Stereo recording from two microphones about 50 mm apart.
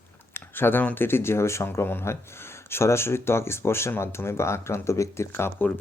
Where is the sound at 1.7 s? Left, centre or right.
Left.